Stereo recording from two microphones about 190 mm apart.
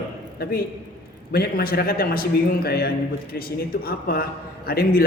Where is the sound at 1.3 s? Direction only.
55° left (ahead or behind).